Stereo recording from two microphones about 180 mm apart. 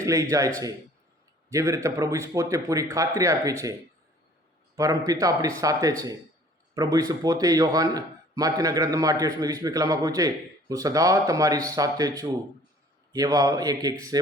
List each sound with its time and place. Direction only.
0.0 s a man's voice: 20° right (ahead or behind)